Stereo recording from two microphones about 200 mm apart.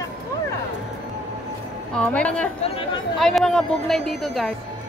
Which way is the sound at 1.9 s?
5° left (ahead or behind).